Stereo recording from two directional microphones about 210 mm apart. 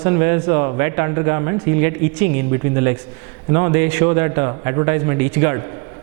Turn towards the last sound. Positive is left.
turn(degrees=-15)  # may be behind; listen again after turning